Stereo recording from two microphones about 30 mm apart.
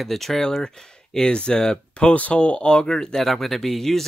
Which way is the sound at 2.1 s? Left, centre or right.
Left.